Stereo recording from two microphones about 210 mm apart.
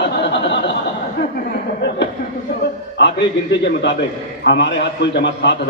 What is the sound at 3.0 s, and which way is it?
A man's voice, 55° left (ahead or behind).